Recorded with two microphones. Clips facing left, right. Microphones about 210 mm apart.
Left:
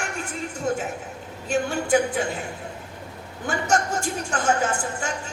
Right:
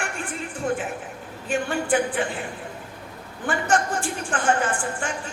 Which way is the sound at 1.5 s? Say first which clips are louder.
Left 2 dB; 40° left (ahead or behind).